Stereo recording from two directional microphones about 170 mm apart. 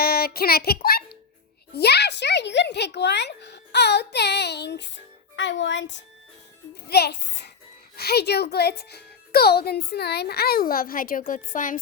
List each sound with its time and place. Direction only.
0.0 s child singing: 65° left (ahead or behind)
1.7 s speech: 75° left (ahead or behind)
6.8 s speech: 70° left (ahead or behind)
7.9 s speech: 70° left (ahead or behind); by 11.8 s 50° left (ahead or behind)